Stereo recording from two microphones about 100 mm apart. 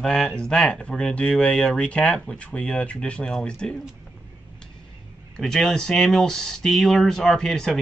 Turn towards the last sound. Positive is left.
turn(degrees=5)  # may be behind; listen again after turning